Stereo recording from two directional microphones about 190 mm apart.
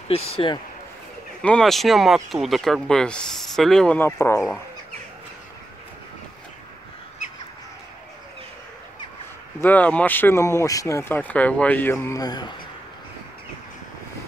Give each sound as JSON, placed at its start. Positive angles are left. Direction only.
{"t": 0.1, "sound": "a man's voice", "side_deg": 30}
{"t": 1.4, "sound": "speech", "side_deg": 5}
{"t": 9.6, "sound": "speech", "side_deg": 10}